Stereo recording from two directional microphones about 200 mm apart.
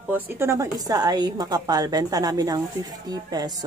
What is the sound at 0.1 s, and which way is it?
A woman's voice, 15° right (ahead or behind).